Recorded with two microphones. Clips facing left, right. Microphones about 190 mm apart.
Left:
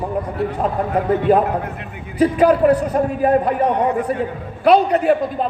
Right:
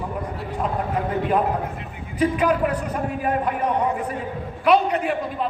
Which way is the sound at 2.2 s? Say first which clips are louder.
Left 6 dB; 35° left (ahead or behind).